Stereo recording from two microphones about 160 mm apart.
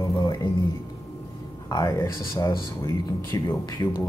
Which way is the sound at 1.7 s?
20° left (ahead or behind).